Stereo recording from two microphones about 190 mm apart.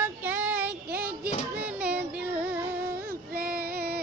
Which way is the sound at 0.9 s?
60° right (ahead or behind).